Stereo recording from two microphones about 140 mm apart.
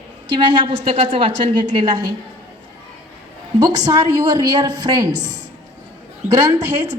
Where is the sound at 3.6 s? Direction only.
30° right (ahead or behind).